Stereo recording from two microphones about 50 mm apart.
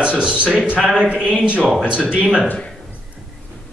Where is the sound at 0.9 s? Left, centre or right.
Right.